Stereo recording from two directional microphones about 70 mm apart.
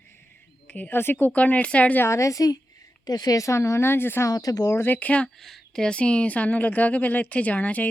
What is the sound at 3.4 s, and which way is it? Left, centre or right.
Speech, left.